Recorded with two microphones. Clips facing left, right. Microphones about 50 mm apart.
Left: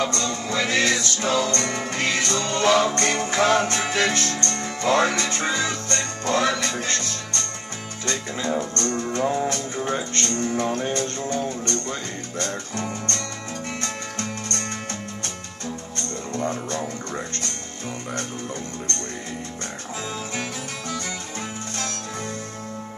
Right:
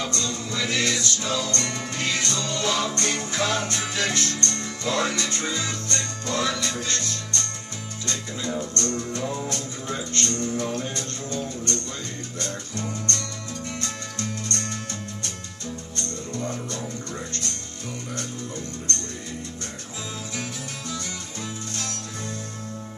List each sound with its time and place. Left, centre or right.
0.0 s music: left
9.2 s music: left
16.0 s music: left